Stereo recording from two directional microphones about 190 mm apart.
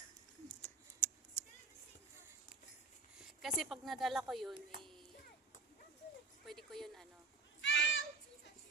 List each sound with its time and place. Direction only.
0.4 s scissors: 10° left (ahead or behind)
3.2 s speech: centre (ahead or behind)
4.8 s a sound: centre (ahead or behind)
6.4 s speech: centre (ahead or behind)
7.6 s children playing: 70° left (ahead or behind)